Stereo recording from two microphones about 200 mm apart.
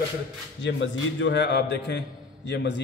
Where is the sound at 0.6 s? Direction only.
65° left (ahead or behind).